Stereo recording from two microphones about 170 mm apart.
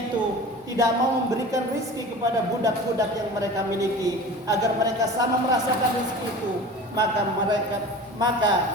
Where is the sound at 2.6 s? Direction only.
20° right (ahead or behind).